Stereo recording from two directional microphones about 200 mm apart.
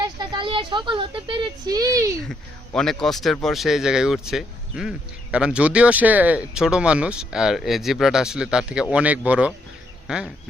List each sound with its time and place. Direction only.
0.0 s speech: 25° right (ahead or behind)
2.3 s speech: centre (ahead or behind)